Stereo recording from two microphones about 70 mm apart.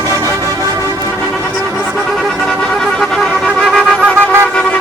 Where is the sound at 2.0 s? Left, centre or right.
Centre.